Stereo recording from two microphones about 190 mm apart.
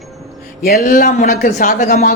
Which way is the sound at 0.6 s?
50° left (ahead or behind).